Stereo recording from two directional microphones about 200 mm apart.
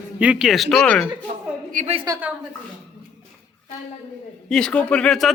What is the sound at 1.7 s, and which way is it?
Speech, 35° right (ahead or behind).